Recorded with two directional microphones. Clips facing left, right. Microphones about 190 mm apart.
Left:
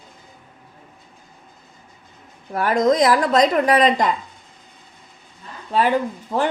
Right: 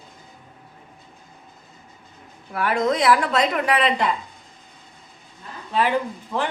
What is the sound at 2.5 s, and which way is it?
A woman's voice, 40° left (ahead or behind).